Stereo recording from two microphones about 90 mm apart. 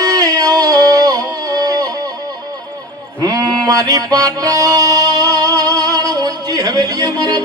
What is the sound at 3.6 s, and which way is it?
Music, 40° right (ahead or behind).